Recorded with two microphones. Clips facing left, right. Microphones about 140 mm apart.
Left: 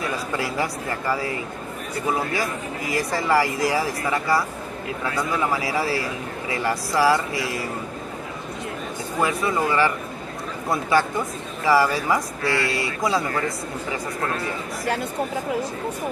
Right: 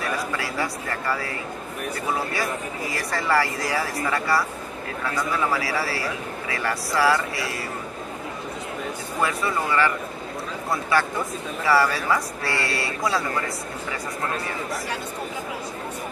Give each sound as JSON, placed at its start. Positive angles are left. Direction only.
{"t": 0.4, "sound": "speech", "side_deg": 20}
{"t": 2.9, "sound": "speech", "side_deg": 15}
{"t": 5.5, "sound": "speech", "side_deg": 20}
{"t": 9.2, "sound": "speech", "side_deg": 20}